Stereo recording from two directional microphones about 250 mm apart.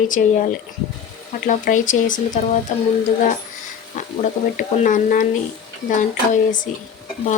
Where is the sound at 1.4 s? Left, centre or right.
Left.